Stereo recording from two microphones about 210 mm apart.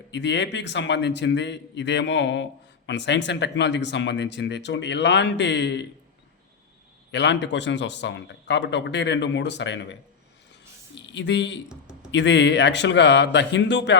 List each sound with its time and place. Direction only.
0.1 s a man's voice: 55° left (ahead or behind)
7.1 s a man's voice: 55° left (ahead or behind)